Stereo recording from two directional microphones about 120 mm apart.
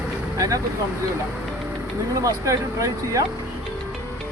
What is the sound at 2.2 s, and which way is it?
Speech, 25° right (ahead or behind).